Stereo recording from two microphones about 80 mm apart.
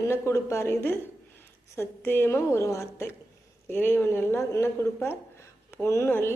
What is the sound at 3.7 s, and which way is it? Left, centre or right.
Speech, left.